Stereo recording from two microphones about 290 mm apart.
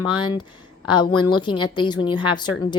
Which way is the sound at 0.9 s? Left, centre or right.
Centre.